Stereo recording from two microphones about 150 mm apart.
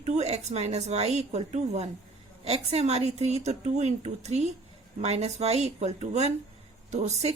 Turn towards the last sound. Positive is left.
turn(degrees=-50)  # may be behind; listen again after turning